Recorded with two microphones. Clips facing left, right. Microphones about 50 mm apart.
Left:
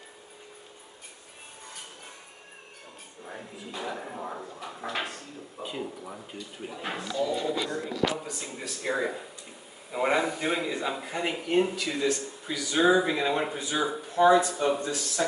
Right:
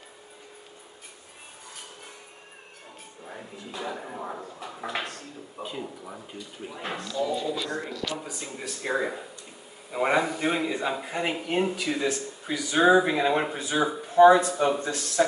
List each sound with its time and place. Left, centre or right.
3.3 s speech: centre
7.0 s speech: centre
8.2 s a man's voice: centre
15.2 s speech: right